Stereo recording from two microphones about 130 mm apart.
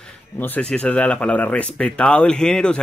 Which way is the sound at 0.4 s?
10° left (ahead or behind).